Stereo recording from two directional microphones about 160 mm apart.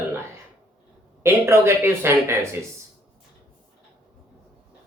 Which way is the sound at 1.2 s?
15° right (ahead or behind).